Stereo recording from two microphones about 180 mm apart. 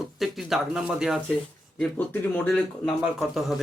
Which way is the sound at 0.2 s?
Centre (ahead or behind).